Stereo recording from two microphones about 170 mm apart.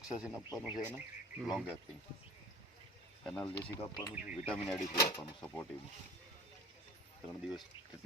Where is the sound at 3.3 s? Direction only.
5° left (ahead or behind).